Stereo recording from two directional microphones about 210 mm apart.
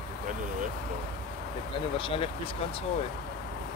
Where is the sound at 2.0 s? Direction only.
25° left (ahead or behind).